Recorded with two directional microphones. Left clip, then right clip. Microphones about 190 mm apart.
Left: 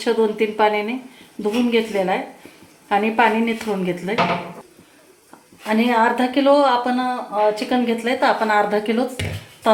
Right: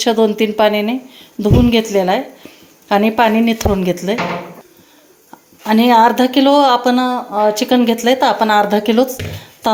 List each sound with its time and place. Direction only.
0.0 s speech: 45° right (ahead or behind)
5.6 s speech: 45° right (ahead or behind)